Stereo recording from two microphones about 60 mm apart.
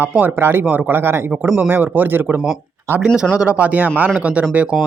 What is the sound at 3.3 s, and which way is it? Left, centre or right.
Speech, centre.